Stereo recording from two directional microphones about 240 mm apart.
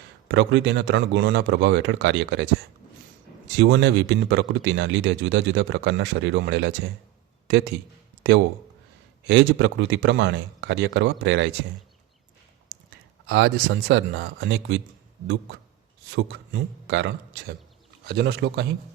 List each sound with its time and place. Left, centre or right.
0.3 s speech: right
3.5 s speech: right
9.2 s speech: right
13.2 s speech: right
16.1 s speech: right